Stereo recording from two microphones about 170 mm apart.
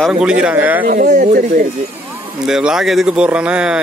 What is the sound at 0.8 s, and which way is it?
Speech, 55° right (ahead or behind).